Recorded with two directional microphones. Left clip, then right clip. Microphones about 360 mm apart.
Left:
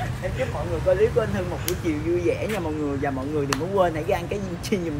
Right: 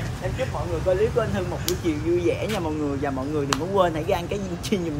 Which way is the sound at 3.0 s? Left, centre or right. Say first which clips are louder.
Even; centre.